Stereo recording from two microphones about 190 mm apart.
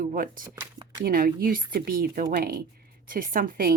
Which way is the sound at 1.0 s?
50° right (ahead or behind).